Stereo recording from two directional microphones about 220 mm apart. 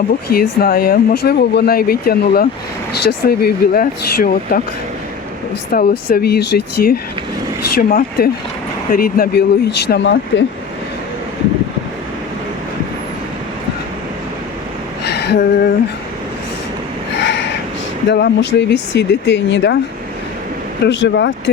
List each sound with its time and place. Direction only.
0.3 s speech: 45° left (ahead or behind)
5.7 s speech: 40° left (ahead or behind)
15.0 s a sound: 50° left (ahead or behind)
17.2 s a sound: 55° left (ahead or behind)
18.1 s speech: 50° left (ahead or behind)
20.8 s speech: 55° left (ahead or behind)